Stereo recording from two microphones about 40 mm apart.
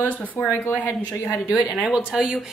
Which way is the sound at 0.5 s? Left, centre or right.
Left.